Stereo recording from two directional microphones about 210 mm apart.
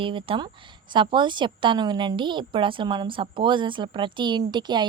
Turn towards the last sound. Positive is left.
turn(degrees=-20)  # may be behind; listen again after turning